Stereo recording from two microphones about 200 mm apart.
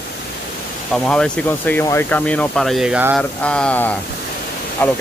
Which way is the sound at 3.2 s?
5° left (ahead or behind).